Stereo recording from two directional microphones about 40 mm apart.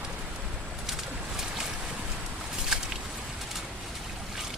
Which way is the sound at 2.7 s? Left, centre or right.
Centre.